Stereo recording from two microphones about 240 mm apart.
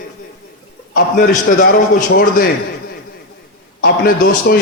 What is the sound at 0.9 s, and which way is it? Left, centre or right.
A man's voice, left.